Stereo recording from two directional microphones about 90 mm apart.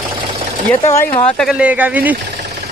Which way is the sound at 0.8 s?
30° left (ahead or behind).